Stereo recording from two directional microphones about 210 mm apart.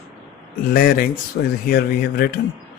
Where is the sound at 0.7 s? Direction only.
45° left (ahead or behind).